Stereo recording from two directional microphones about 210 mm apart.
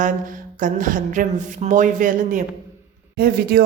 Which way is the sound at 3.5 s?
45° right (ahead or behind).